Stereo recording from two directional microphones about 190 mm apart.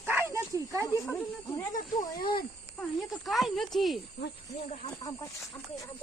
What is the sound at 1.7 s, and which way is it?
Speech, 45° left (ahead or behind).